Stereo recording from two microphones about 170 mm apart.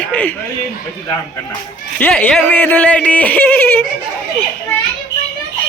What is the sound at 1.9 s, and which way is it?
Speech, 10° left (ahead or behind).